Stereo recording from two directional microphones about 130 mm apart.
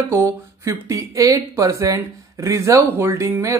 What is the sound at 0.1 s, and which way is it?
Speech, 20° right (ahead or behind).